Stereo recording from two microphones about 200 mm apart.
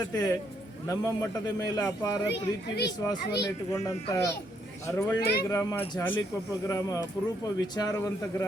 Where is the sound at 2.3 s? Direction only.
55° left (ahead or behind).